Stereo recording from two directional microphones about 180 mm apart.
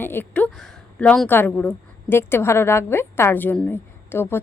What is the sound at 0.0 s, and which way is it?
A woman's voice, 10° left (ahead or behind).